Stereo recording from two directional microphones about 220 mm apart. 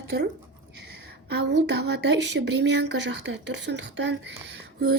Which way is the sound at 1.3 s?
50° right (ahead or behind).